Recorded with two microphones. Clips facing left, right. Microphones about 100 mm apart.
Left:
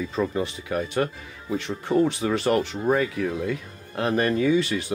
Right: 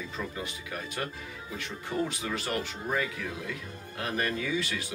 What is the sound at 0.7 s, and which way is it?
Speech, 35° left (ahead or behind).